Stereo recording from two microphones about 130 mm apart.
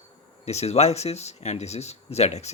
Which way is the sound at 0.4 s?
55° left (ahead or behind).